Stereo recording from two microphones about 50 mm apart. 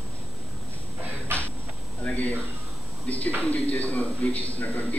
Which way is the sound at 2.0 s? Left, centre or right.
Left.